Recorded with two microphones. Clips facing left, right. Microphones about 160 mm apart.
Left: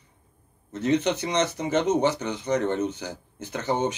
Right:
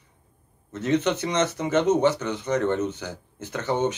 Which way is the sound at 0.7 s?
15° left (ahead or behind).